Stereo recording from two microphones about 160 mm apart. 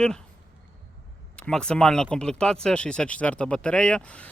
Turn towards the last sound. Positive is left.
turn(degrees=10)  # may be behind; listen again after turning